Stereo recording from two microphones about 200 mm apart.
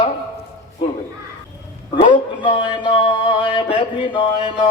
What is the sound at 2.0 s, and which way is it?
A man's voice, 25° left (ahead or behind).